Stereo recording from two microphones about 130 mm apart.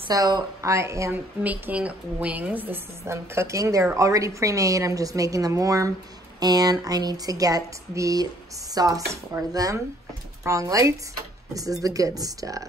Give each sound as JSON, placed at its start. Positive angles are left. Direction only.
{"t": 0.1, "sound": "a woman's voice", "side_deg": -25}
{"t": 1.4, "sound": "a woman's voice", "side_deg": -10}